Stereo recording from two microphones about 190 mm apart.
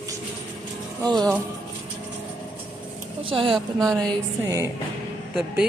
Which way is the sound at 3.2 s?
25° right (ahead or behind).